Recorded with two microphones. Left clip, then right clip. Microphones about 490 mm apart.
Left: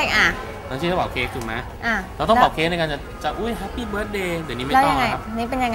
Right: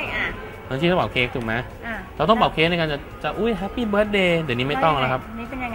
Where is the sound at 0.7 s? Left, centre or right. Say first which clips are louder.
Right 2 dB; right.